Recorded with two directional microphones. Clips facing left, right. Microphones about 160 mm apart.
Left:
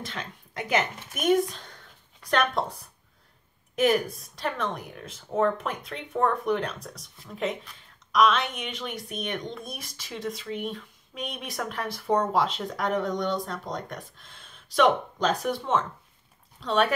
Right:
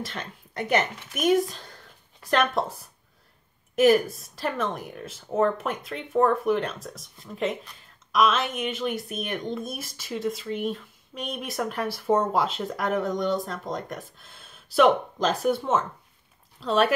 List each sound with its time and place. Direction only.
0.0 s a woman's voice: centre (ahead or behind)